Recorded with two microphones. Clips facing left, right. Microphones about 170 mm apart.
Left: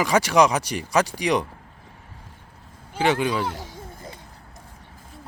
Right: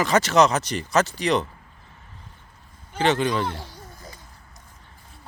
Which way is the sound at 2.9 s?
10° left (ahead or behind).